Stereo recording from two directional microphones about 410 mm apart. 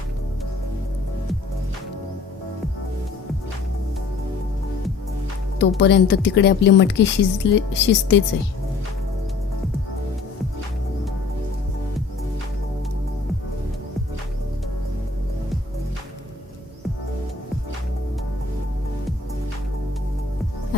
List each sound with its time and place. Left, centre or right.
5.5 s a woman's voice: left